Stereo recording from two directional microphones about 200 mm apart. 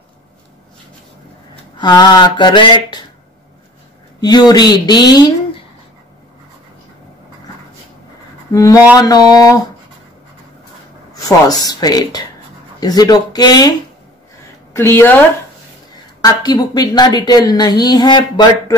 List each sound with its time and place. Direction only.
1.8 s speech: 20° left (ahead or behind)
4.2 s speech: 20° left (ahead or behind)
8.5 s speech: 15° left (ahead or behind)
11.1 s speech: 20° left (ahead or behind)
16.2 s speech: 20° left (ahead or behind)